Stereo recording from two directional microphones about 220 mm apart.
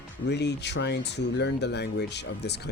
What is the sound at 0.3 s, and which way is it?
Speech, 50° left (ahead or behind).